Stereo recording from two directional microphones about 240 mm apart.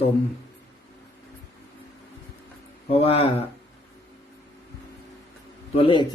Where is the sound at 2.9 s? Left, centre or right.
Left.